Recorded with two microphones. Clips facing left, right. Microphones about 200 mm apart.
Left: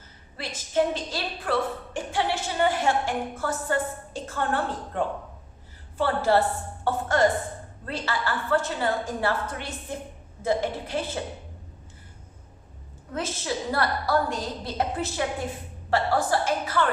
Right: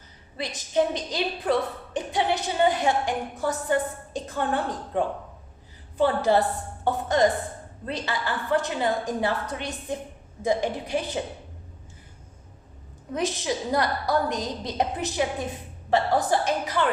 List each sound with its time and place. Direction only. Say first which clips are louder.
0.3 s a woman's voice: right 1 dB; 15° right (ahead or behind)
13.1 s a woman's voice: right 3 dB; 15° right (ahead or behind)